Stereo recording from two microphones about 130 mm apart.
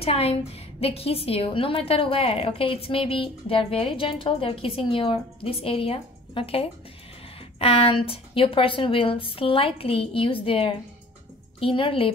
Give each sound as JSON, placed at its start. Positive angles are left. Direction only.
{"t": 0.0, "sound": "a woman's voice", "side_deg": 50}